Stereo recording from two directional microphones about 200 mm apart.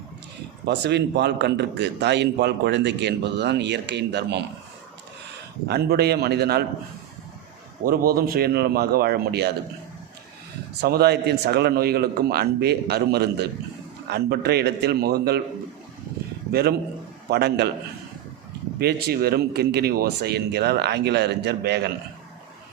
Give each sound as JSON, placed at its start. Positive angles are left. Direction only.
{"t": 0.6, "sound": "a man's voice", "side_deg": -60}
{"t": 5.6, "sound": "speech", "side_deg": -55}
{"t": 7.9, "sound": "speech", "side_deg": -45}
{"t": 10.8, "sound": "speech", "side_deg": -50}
{"t": 16.5, "sound": "a man's voice", "side_deg": -50}
{"t": 18.8, "sound": "speech", "side_deg": -55}